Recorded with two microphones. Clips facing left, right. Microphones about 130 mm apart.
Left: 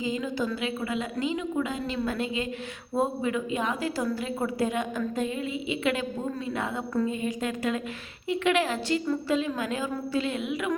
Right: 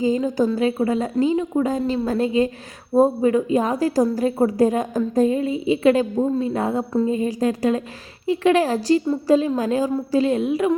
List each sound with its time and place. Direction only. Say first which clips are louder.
0.0 s a woman's voice: right 10 dB; 40° right (ahead or behind)